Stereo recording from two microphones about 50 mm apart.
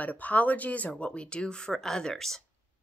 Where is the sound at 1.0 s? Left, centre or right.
Left.